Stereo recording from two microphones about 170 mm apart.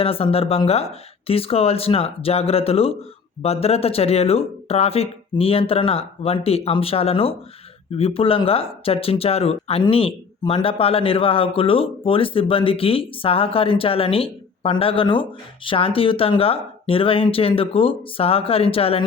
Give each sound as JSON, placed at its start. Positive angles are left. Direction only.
{"t": 0.0, "sound": "speech", "side_deg": 35}